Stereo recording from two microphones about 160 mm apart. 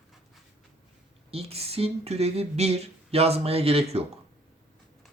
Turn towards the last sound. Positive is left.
turn(degrees=-40)  # may be behind; listen again after turning